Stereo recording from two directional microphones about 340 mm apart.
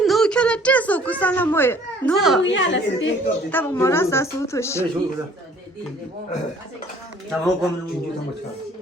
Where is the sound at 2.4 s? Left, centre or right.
Left.